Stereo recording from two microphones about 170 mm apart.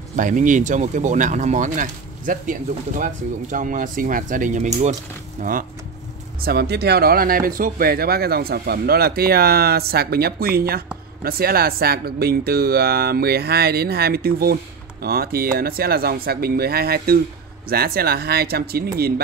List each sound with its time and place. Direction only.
0.1 s speech: 50° right (ahead or behind)
5.4 s speech: 55° right (ahead or behind)
6.4 s speech: 70° right (ahead or behind)